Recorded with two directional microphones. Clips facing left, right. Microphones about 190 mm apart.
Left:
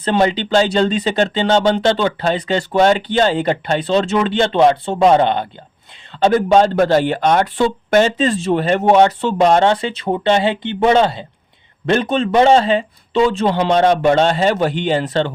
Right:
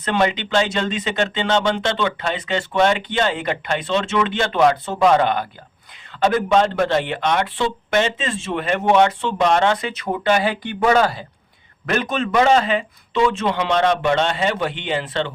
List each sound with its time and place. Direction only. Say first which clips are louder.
0.0 s speech: left 4 dB; 30° left (ahead or behind)